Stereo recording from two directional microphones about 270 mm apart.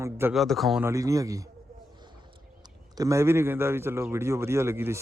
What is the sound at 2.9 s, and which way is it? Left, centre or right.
Speech, centre.